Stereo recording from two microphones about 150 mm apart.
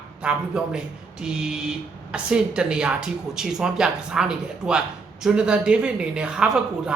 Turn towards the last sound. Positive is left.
turn(degrees=-5)  # may be behind; listen again after turning